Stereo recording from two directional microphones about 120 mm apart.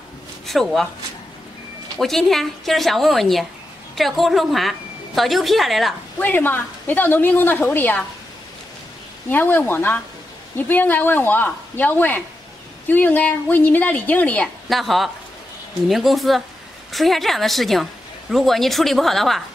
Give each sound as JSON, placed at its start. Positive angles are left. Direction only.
{"t": 0.5, "sound": "a woman's voice", "side_deg": 0}
{"t": 2.0, "sound": "a woman's voice", "side_deg": 0}
{"t": 6.1, "sound": "a woman's voice", "side_deg": 15}
{"t": 9.3, "sound": "a woman's voice", "side_deg": 15}
{"t": 14.7, "sound": "a woman's voice", "side_deg": 0}